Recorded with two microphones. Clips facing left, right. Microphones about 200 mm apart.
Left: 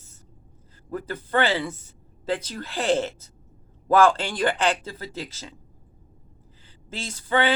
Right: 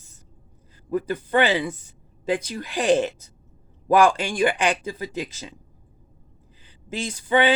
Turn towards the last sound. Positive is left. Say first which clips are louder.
# right 3 dB
turn(degrees=-15)  # may be behind; listen again after turning